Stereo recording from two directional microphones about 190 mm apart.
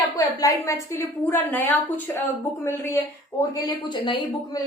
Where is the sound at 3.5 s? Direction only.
25° left (ahead or behind).